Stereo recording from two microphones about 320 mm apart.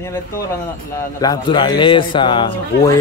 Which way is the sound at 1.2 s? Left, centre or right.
Centre.